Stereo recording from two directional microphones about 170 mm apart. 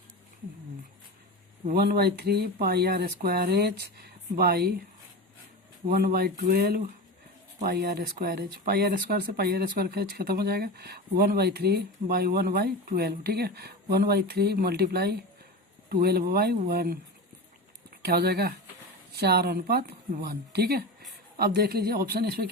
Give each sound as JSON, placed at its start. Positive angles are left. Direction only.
{"t": 1.7, "sound": "speech", "side_deg": -70}
{"t": 5.9, "sound": "speech", "side_deg": -60}